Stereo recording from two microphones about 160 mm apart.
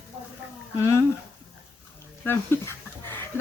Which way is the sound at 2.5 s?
15° left (ahead or behind).